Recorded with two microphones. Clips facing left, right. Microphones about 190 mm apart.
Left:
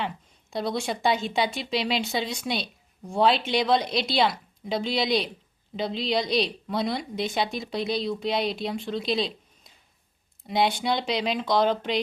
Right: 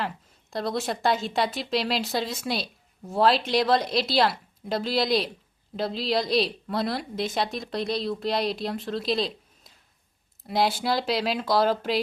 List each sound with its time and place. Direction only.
0.5 s speech: centre (ahead or behind)